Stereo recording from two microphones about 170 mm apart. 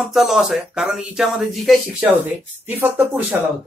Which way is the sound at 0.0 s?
Centre (ahead or behind).